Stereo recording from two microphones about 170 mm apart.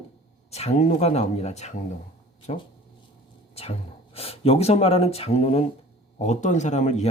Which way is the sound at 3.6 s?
35° left (ahead or behind).